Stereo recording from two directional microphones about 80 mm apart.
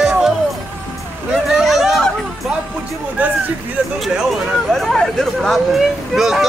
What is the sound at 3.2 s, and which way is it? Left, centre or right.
Speech, right.